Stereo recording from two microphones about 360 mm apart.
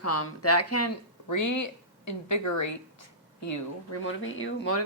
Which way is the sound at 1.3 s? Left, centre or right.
Left.